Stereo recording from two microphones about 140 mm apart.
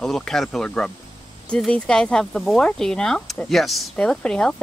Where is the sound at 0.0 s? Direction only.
5° left (ahead or behind).